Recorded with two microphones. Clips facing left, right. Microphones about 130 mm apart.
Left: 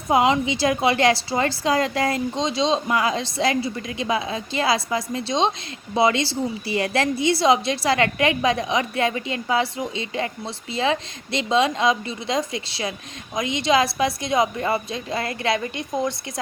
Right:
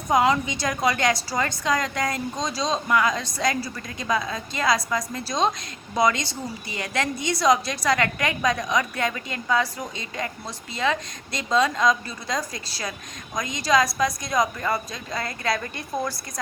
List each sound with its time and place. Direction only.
0.1 s a woman's voice: 25° left (ahead or behind)